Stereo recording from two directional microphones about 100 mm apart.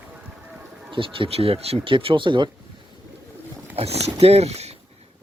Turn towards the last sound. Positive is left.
turn(degrees=-90)